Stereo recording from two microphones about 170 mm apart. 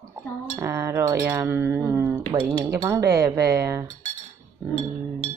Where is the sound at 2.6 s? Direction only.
15° right (ahead or behind).